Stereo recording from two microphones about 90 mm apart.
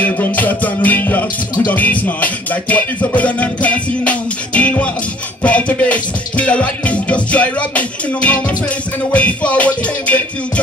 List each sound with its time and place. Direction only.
0.0 s music: 20° left (ahead or behind)